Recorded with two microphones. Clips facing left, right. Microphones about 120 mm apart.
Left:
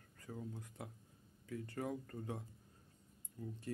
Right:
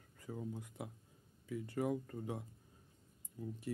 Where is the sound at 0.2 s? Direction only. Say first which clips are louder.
Right 3 dB; 15° right (ahead or behind).